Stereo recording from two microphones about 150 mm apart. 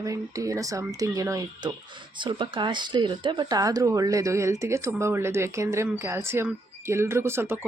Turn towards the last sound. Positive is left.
turn(degrees=-15)  # may be behind; listen again after turning